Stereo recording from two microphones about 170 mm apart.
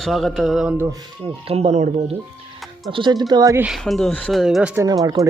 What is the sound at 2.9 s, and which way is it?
Speech, 25° right (ahead or behind).